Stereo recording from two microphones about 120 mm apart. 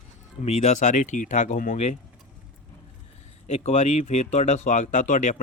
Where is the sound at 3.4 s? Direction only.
65° left (ahead or behind).